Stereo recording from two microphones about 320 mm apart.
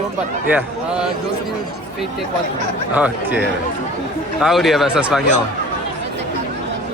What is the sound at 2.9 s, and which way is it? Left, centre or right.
Speech, centre.